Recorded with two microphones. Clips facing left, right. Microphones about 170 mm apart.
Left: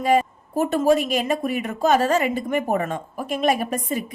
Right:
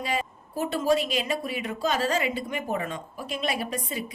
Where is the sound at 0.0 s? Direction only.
50° left (ahead or behind).